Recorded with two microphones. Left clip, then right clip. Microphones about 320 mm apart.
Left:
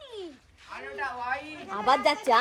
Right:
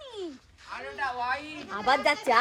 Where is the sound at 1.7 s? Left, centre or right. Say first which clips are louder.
Left 1 dB; left.